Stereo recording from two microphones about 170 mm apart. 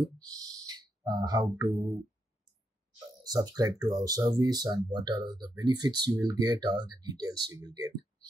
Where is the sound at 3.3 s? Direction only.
20° right (ahead or behind).